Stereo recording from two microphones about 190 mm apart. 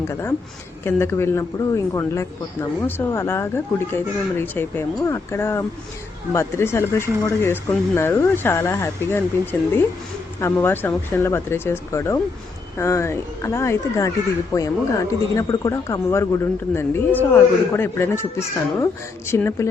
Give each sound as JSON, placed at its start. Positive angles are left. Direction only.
{"t": 0.1, "sound": "speech", "side_deg": 15}